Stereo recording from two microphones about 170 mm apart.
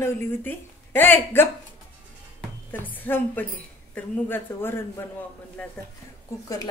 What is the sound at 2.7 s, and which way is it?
A woman's voice, 10° left (ahead or behind).